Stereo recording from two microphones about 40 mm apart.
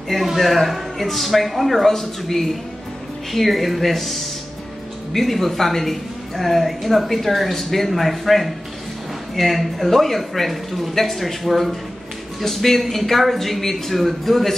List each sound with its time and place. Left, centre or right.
0.1 s a woman's voice: centre